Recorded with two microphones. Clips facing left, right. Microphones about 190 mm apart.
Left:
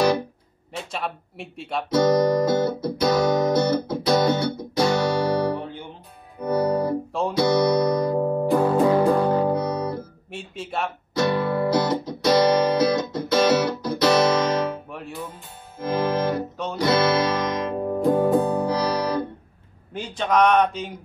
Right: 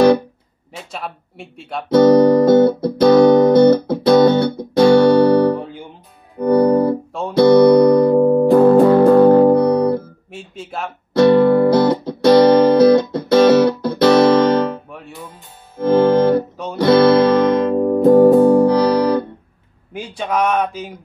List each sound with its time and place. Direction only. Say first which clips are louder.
0.9 s speech: right 1 dB; centre (ahead or behind)
1.9 s music: right 9 dB; 55° right (ahead or behind)
10.3 s speech: even; centre (ahead or behind)
11.1 s music: right 11 dB; 55° right (ahead or behind)
14.9 s music: even; centre (ahead or behind)
15.8 s music: right 10 dB; 60° right (ahead or behind)
19.9 s a man's voice: right 1 dB; 10° right (ahead or behind)